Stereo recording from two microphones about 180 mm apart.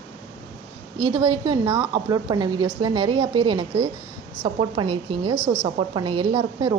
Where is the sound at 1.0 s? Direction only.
20° right (ahead or behind).